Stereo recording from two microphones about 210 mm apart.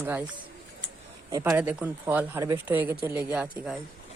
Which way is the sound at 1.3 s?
10° right (ahead or behind).